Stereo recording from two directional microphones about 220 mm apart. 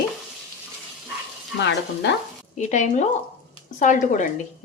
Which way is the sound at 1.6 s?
50° left (ahead or behind).